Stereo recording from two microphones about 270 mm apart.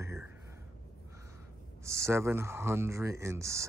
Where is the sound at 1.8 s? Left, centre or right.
Centre.